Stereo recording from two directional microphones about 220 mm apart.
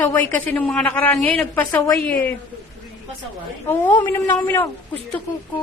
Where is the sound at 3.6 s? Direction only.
10° left (ahead or behind).